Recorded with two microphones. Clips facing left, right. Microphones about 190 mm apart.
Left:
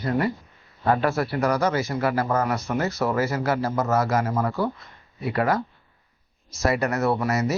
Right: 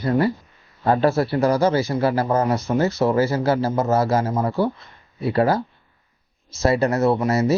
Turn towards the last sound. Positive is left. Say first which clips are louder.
# right 4 dB
turn(degrees=-30)  # may be behind; listen again after turning